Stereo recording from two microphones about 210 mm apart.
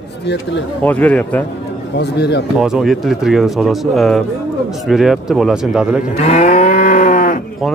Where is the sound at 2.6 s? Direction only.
Centre (ahead or behind).